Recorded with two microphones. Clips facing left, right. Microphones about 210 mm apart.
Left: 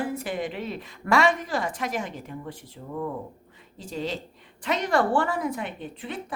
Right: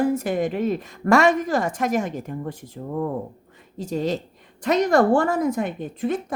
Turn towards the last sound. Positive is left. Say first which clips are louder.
# right 10 dB
turn(degrees=-45)  # may be behind; listen again after turning